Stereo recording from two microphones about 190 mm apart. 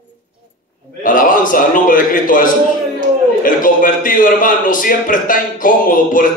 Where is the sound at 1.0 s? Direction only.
45° left (ahead or behind).